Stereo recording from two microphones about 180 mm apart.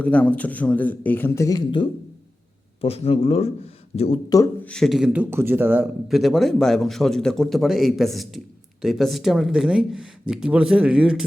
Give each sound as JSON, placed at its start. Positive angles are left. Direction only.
{"t": 0.0, "sound": "a man's voice", "side_deg": 10}
{"t": 4.6, "sound": "speech", "side_deg": 5}